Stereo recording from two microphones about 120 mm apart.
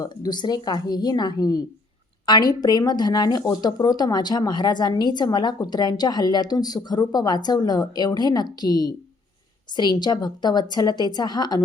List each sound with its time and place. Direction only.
0.0 s speech: 35° left (ahead or behind)